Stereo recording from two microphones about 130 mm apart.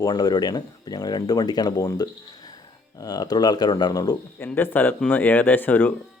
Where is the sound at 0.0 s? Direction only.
30° left (ahead or behind).